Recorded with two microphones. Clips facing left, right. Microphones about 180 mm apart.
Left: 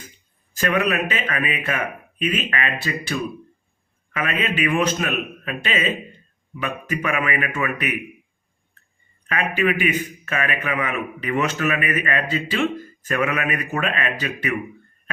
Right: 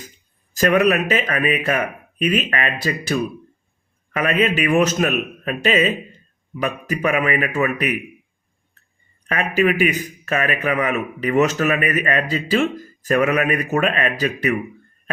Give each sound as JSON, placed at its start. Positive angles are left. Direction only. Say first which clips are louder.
{"t": 0.5, "sound": "a man's voice", "louder": "right 5 dB", "side_deg": -40}
{"t": 9.6, "sound": "a man's voice", "louder": "right 4 dB", "side_deg": -40}